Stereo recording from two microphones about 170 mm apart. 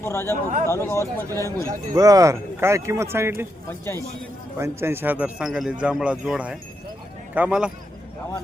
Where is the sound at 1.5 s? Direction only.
20° right (ahead or behind).